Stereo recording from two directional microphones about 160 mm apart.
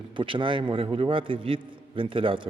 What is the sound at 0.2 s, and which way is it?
A man's voice, 30° right (ahead or behind).